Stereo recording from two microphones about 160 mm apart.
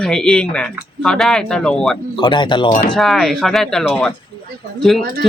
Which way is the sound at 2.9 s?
Centre (ahead or behind).